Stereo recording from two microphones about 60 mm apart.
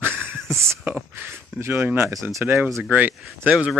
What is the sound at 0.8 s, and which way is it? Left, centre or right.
Speech, right.